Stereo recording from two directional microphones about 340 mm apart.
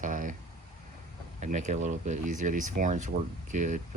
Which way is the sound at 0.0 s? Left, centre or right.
Right.